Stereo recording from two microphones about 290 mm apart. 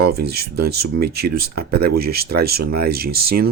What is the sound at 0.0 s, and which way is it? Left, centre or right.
Speech, right.